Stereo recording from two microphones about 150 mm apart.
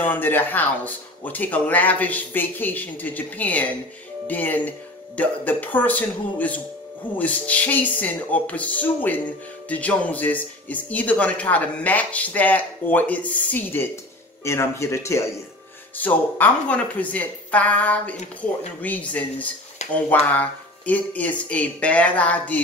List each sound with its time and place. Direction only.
0.0 s speech: 15° left (ahead or behind)